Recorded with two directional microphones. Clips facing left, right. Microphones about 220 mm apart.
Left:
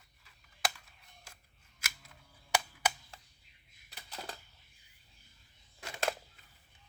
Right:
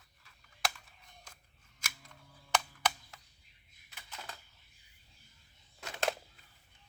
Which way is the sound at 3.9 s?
35° left (ahead or behind).